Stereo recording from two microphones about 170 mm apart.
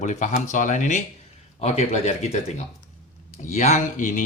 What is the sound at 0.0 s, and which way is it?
Speech, 45° left (ahead or behind).